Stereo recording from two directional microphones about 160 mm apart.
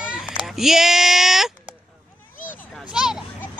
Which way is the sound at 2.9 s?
5° right (ahead or behind).